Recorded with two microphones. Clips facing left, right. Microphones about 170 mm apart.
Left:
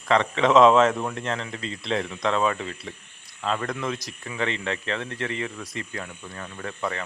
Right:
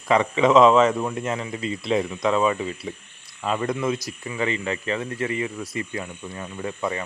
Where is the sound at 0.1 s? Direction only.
10° right (ahead or behind).